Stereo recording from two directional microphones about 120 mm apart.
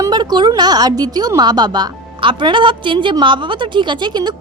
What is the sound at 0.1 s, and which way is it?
A woman's voice, 35° right (ahead or behind).